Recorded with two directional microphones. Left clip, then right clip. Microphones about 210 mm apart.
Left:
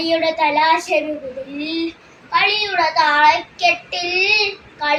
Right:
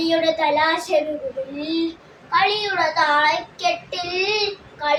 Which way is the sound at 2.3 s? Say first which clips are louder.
Left 2 dB; 20° right (ahead or behind).